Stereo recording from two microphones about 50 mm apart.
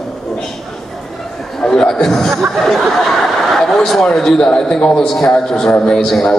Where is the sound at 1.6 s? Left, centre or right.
Centre.